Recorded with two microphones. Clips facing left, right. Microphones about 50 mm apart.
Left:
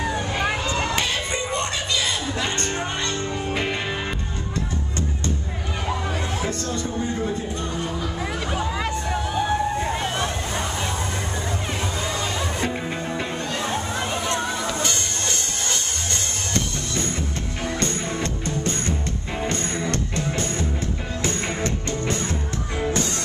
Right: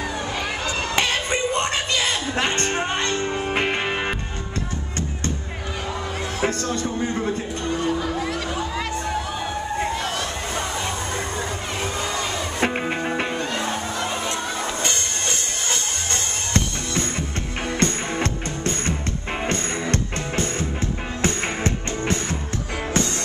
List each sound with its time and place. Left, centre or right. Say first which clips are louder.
0.3 s a sound: left 3 dB; left
0.9 s music: right 3 dB; right
6.4 s music: right 3 dB; right
8.2 s music: right 1 dB; centre
9.9 s vehicle: left 1 dB; left
12.5 s music: right 3 dB; right
13.3 s music: right 2 dB; right
21.2 s music: right 2 dB; right